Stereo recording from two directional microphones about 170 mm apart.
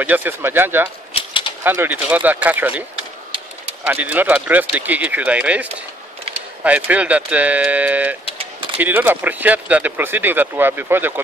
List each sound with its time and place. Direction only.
0.0 s speech: 10° right (ahead or behind)
1.1 s typewriter: 30° left (ahead or behind)
1.6 s speech: 10° right (ahead or behind)
3.8 s speech: 10° right (ahead or behind)